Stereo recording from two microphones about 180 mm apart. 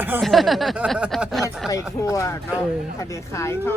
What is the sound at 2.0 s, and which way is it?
Speech, 15° left (ahead or behind).